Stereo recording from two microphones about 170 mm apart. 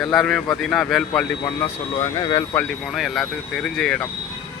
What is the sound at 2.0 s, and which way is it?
Speech, 25° left (ahead or behind).